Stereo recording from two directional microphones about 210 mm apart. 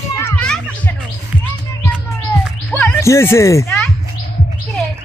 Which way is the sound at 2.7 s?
10° left (ahead or behind).